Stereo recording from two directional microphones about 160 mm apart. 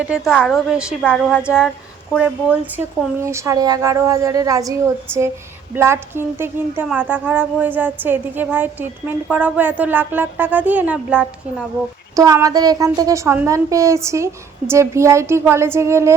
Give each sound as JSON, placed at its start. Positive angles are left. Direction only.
{"t": 0.0, "sound": "a woman's voice", "side_deg": -5}
{"t": 5.7, "sound": "a woman's voice", "side_deg": -15}
{"t": 12.1, "sound": "a woman's voice", "side_deg": -20}